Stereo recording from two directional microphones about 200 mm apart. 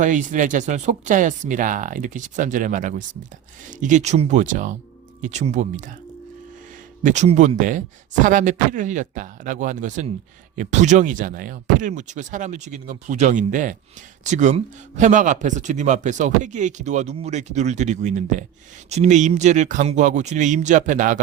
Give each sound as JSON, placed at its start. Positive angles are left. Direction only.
{"t": 0.0, "sound": "speech", "side_deg": -40}
{"t": 7.0, "sound": "speech", "side_deg": -35}